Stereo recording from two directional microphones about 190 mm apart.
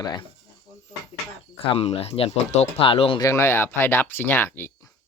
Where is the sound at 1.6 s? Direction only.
30° left (ahead or behind).